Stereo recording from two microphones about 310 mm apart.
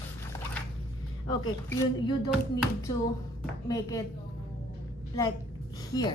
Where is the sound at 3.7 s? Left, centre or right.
Centre.